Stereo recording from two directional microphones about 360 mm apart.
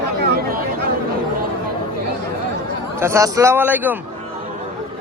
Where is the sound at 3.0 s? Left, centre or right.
Centre.